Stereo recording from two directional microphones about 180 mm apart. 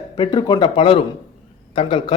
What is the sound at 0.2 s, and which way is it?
Speech, 25° left (ahead or behind).